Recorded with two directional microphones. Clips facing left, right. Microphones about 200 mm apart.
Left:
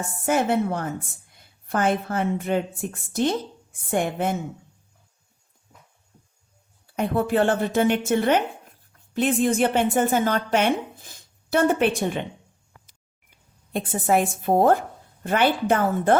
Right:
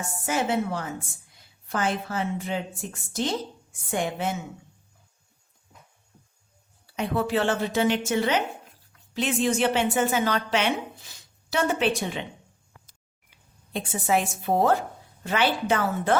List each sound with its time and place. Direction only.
0.0 s a woman's voice: 55° left (ahead or behind)
6.8 s a woman's voice: 50° left (ahead or behind)
13.3 s speech: 50° left (ahead or behind)